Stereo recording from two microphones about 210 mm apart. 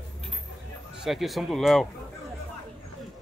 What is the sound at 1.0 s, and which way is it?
Speech, centre (ahead or behind).